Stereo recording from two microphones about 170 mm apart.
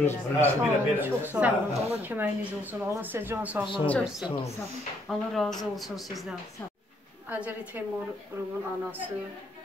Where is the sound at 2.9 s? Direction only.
10° right (ahead or behind).